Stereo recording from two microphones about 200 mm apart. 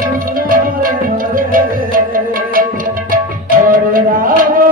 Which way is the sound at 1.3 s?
45° right (ahead or behind).